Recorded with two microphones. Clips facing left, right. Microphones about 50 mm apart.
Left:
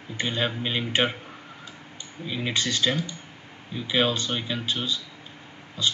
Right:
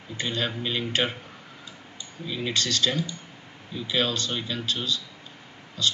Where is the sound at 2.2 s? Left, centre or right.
Centre.